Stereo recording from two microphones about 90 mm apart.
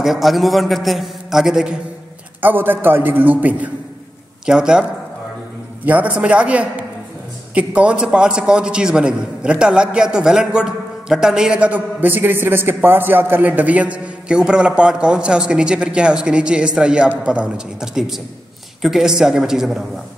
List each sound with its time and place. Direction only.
0.0 s a man's voice: 5° right (ahead or behind)
2.4 s a man's voice: 20° right (ahead or behind)
4.5 s a man's voice: 10° right (ahead or behind)
5.9 s a man's voice: 15° right (ahead or behind)